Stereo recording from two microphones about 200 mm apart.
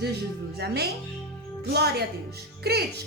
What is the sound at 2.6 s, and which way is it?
Speech, 55° right (ahead or behind).